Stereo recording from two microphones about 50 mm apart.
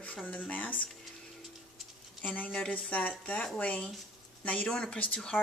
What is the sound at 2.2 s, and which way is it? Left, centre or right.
Speech, left.